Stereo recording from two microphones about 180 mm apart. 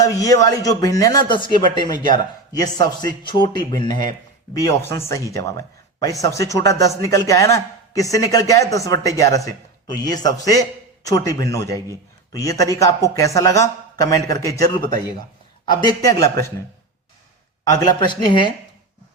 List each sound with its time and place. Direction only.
0.0 s a man's voice: 20° left (ahead or behind)
4.5 s a man's voice: 15° left (ahead or behind)
17.7 s a man's voice: 25° left (ahead or behind)